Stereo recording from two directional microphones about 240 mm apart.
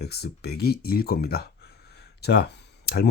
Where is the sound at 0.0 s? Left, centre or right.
Left.